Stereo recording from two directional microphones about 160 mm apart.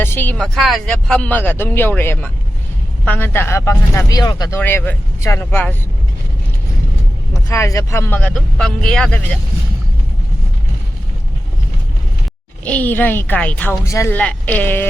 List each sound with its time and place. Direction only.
0.0 s speech: 15° left (ahead or behind)
4.6 s speech: 10° left (ahead or behind)
7.3 s speech: 15° left (ahead or behind)
12.6 s speech: 10° left (ahead or behind)